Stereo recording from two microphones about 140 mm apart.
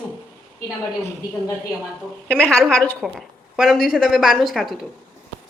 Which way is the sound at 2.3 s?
5° left (ahead or behind).